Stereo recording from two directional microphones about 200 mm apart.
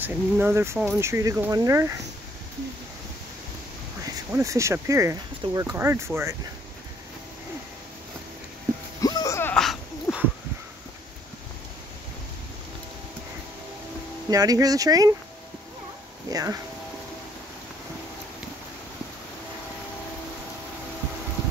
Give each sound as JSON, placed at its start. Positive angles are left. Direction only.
{"t": 0.0, "sound": "speech", "side_deg": -10}
{"t": 4.0, "sound": "speech", "side_deg": -15}
{"t": 9.0, "sound": "a sound", "side_deg": 15}
{"t": 14.3, "sound": "speech", "side_deg": -20}
{"t": 16.3, "sound": "speech", "side_deg": -20}